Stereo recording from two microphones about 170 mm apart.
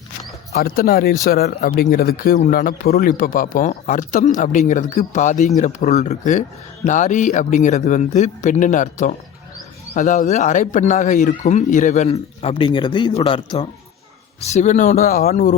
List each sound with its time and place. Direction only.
0.5 s speech: 60° left (ahead or behind); by 12.1 s 45° left (ahead or behind)
12.4 s speech: 30° left (ahead or behind)
14.4 s speech: 40° left (ahead or behind)